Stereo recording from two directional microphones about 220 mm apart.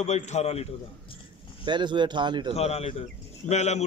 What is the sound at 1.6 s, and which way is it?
Speech, 20° right (ahead or behind).